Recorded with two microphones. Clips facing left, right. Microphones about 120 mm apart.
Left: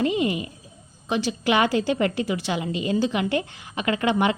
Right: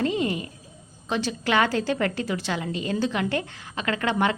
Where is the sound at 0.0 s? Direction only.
10° left (ahead or behind).